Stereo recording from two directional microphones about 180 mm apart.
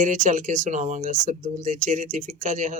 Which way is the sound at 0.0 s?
45° right (ahead or behind).